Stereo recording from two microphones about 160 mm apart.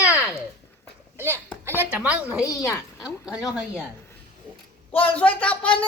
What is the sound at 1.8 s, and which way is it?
Speech, 10° right (ahead or behind).